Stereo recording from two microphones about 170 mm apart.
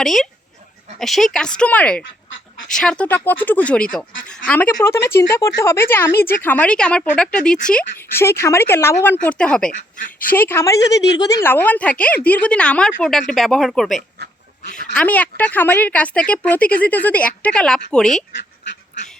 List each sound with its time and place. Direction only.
0.0 s a woman's voice: centre (ahead or behind)
9.9 s speech: 50° left (ahead or behind)
10.3 s a woman's voice: 15° left (ahead or behind)
10.8 s a woman's voice: 90° left
11.2 s a woman's voice: 20° left (ahead or behind)